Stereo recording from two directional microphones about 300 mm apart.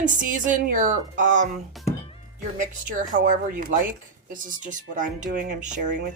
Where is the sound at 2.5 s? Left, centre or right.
Right.